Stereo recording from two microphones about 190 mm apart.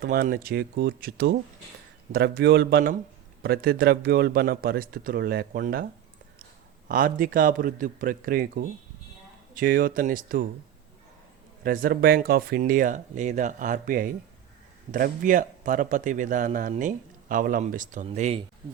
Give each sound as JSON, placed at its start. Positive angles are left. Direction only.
{"t": 0.0, "sound": "speech", "side_deg": -50}
{"t": 6.8, "sound": "speech", "side_deg": -45}
{"t": 11.6, "sound": "speech", "side_deg": -50}